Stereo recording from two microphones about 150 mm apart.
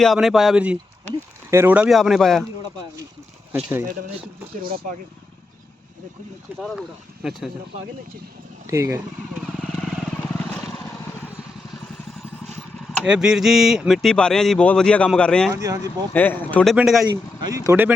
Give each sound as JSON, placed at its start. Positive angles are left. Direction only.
{"t": 0.0, "sound": "speech", "side_deg": 0}
{"t": 3.5, "sound": "speech", "side_deg": -15}
{"t": 6.6, "sound": "speech", "side_deg": 0}
{"t": 8.6, "sound": "speech", "side_deg": -20}
{"t": 9.3, "sound": "vehicle", "side_deg": 0}
{"t": 13.1, "sound": "speech", "side_deg": -5}
{"t": 15.5, "sound": "speech", "side_deg": -20}
{"t": 16.1, "sound": "speech", "side_deg": 10}
{"t": 16.7, "sound": "speech", "side_deg": 0}
{"t": 17.4, "sound": "speech", "side_deg": -20}